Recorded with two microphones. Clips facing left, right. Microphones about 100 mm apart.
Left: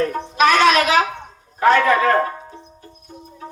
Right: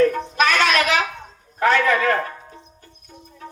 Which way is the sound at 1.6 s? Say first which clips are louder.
Left 3 dB; 40° left (ahead or behind).